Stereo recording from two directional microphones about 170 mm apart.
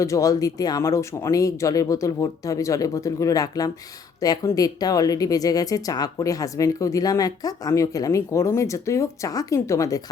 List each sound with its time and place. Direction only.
0.0 s speech: 20° left (ahead or behind)